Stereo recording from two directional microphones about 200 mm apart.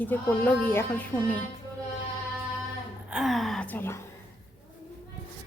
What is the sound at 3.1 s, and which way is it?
Gasp, centre (ahead or behind).